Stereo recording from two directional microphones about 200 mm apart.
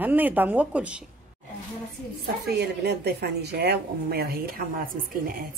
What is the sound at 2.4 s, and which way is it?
Speech, 55° right (ahead or behind).